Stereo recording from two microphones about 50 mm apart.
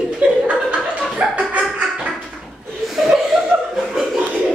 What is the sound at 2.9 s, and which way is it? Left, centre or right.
Chuckle, centre.